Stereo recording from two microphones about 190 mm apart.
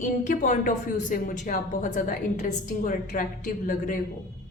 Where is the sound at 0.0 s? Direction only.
40° left (ahead or behind).